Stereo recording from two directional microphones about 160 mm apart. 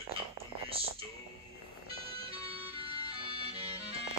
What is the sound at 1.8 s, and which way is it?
Music, 35° right (ahead or behind).